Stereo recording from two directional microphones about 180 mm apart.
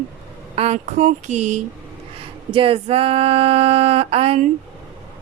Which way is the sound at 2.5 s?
30° right (ahead or behind).